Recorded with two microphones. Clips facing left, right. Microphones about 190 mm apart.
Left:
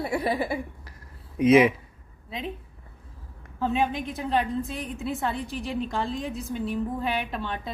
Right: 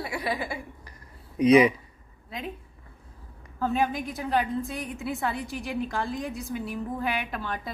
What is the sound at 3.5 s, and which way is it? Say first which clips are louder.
A woman's voice: left 1 dB; centre (ahead or behind).